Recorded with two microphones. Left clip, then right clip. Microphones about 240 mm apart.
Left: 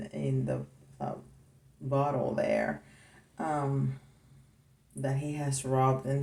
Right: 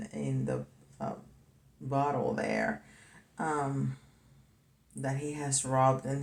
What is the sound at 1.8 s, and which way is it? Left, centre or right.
Speech, centre.